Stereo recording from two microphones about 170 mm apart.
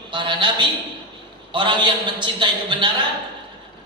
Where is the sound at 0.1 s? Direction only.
30° right (ahead or behind).